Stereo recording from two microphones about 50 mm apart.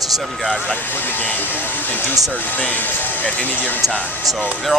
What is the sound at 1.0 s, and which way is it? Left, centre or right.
Speech, left.